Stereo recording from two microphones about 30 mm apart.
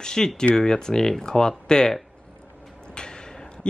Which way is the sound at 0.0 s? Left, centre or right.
Left.